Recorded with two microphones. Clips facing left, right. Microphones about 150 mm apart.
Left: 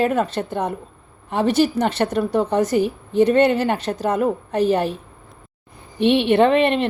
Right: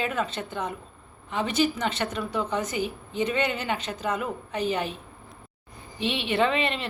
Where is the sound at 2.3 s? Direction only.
60° left (ahead or behind).